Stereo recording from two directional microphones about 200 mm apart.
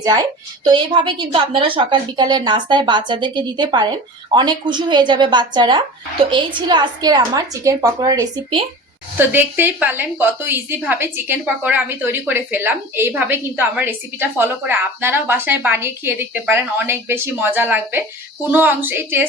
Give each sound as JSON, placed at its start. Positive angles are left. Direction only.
{"t": 0.0, "sound": "a woman's voice", "side_deg": -20}